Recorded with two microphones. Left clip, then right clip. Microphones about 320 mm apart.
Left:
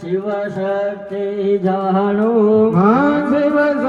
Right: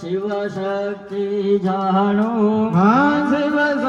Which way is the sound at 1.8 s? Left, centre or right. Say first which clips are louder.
Left 2 dB; centre.